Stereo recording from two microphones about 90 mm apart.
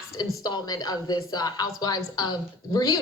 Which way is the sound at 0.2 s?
50° left (ahead or behind).